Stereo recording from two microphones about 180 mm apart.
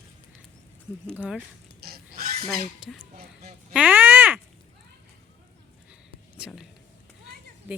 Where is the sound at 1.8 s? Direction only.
60° right (ahead or behind).